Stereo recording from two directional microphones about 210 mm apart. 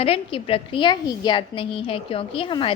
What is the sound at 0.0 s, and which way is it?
A woman's voice, 25° left (ahead or behind).